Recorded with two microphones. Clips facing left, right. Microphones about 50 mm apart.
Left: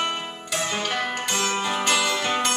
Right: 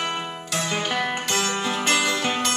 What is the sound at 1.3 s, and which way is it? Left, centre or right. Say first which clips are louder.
Music: left 2 dB; centre.